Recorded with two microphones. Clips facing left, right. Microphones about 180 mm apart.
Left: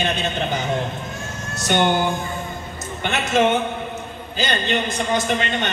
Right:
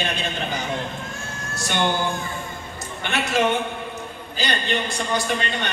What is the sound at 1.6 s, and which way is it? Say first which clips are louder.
Speech: left 5 dB; 20° left (ahead or behind).